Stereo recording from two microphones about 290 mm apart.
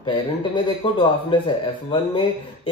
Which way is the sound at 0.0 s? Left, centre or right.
Centre.